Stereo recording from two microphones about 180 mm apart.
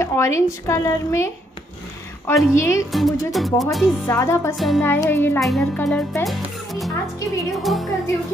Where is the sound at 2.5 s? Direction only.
15° left (ahead or behind).